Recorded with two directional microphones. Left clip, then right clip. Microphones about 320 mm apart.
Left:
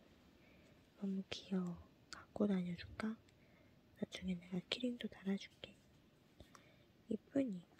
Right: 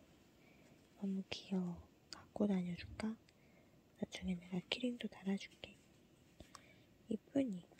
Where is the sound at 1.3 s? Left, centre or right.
Centre.